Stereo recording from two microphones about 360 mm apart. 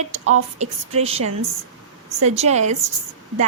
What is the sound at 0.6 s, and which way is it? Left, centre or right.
A woman's voice, centre.